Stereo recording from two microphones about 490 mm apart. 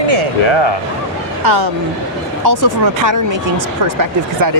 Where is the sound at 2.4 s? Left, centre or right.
Right.